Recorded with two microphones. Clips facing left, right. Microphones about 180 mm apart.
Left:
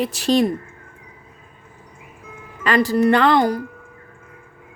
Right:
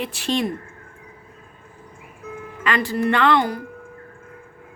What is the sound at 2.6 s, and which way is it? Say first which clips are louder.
Speech: left 5 dB; 40° left (ahead or behind).